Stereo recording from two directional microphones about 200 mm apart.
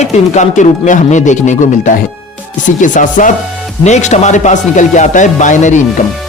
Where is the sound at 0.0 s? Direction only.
35° left (ahead or behind).